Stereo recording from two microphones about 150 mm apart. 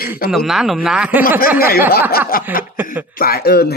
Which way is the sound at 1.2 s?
75° left (ahead or behind).